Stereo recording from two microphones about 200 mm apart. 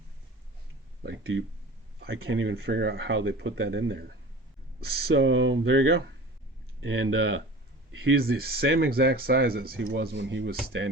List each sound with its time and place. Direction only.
1.0 s speech: 65° right (ahead or behind)
8.0 s speech: 50° right (ahead or behind)